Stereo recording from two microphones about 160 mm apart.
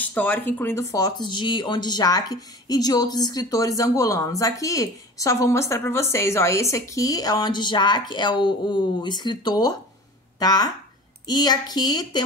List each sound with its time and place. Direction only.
0.0 s speech: 10° left (ahead or behind)